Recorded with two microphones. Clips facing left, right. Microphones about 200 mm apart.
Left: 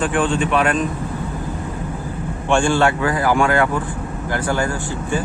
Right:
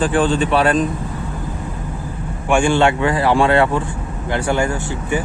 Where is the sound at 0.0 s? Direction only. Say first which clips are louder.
Right 2 dB; 35° right (ahead or behind).